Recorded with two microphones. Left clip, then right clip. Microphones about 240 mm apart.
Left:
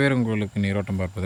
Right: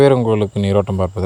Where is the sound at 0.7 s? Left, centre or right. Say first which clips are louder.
Right 12 dB; right.